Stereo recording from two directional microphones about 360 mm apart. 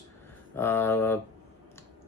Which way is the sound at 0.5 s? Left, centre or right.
Centre.